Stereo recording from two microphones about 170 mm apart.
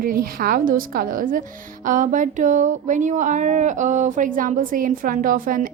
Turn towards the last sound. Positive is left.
turn(degrees=-55)  # may be behind; listen again after turning